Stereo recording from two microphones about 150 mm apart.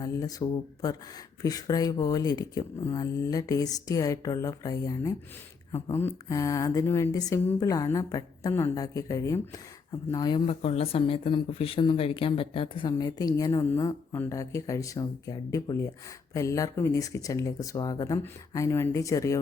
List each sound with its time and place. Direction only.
0.0 s speech: 25° left (ahead or behind)